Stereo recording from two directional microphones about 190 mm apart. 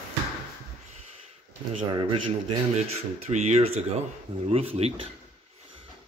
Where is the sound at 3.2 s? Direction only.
35° right (ahead or behind).